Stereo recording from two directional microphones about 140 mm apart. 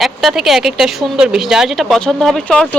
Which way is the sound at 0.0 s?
Centre (ahead or behind).